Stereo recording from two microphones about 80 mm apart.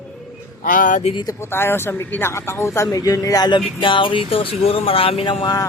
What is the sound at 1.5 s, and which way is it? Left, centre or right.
Speech, left.